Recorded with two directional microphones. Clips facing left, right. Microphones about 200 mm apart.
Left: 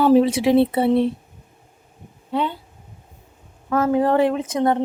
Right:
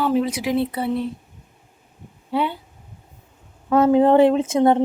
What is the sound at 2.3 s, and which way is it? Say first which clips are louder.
Speech: right 1 dB; 10° right (ahead or behind).